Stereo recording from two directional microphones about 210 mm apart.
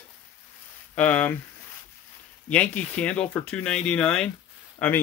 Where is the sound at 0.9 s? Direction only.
5° left (ahead or behind).